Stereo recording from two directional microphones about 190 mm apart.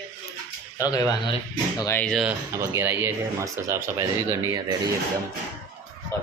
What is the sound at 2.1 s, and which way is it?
Speech, centre (ahead or behind).